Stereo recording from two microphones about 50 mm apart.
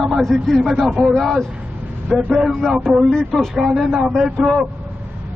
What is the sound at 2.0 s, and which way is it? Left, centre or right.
Speech, centre.